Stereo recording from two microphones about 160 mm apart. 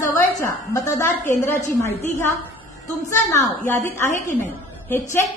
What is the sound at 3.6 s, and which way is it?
A woman's voice, 15° left (ahead or behind).